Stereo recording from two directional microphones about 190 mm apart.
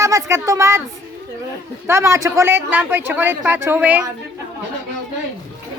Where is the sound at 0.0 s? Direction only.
15° right (ahead or behind).